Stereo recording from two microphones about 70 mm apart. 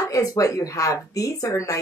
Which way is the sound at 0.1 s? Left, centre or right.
Left.